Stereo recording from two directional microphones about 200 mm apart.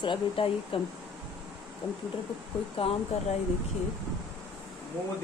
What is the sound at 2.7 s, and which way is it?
Speech, 30° left (ahead or behind).